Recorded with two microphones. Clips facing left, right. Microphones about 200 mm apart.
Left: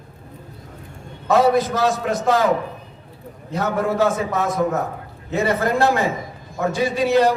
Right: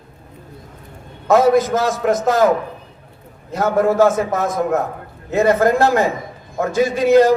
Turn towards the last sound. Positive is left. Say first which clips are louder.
# right 5 dB
turn(degrees=-45)  # may be behind; listen again after turning